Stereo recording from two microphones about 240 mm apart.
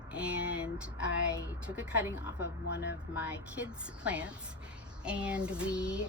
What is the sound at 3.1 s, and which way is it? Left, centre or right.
Speech, centre.